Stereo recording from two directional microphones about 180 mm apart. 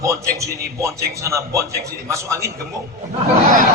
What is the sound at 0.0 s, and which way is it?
A man's voice, 15° right (ahead or behind).